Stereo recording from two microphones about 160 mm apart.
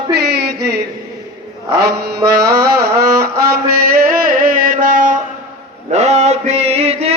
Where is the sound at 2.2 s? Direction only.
90° right; by 5.1 s 55° right (ahead or behind).